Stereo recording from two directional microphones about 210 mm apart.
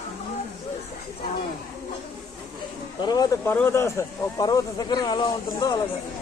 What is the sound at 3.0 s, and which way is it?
Speech, 20° left (ahead or behind).